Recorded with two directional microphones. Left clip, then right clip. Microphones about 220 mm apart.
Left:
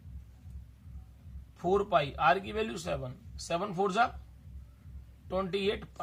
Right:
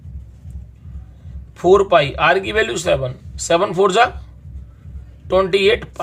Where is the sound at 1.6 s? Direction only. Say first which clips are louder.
Right 16 dB; 40° right (ahead or behind).